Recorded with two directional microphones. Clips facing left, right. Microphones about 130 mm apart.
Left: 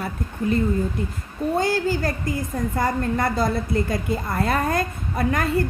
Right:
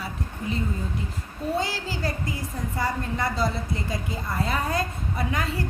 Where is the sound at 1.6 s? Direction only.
50° left (ahead or behind).